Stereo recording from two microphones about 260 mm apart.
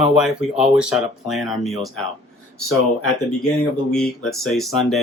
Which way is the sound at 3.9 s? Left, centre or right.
Centre.